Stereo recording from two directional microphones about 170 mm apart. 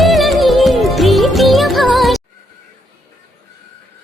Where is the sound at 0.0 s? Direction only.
Centre (ahead or behind).